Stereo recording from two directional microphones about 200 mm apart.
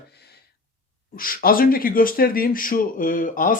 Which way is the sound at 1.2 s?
45° left (ahead or behind).